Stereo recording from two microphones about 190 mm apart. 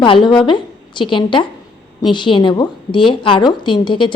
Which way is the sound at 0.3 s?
25° left (ahead or behind).